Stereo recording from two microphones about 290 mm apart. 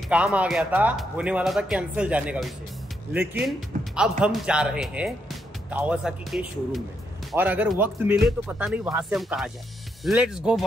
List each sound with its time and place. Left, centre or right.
0.1 s speech: centre